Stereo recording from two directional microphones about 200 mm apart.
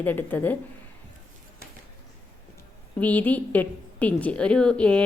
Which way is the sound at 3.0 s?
10° left (ahead or behind).